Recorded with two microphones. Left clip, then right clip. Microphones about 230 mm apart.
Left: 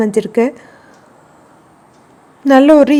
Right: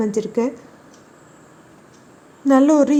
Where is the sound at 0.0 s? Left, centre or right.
Left.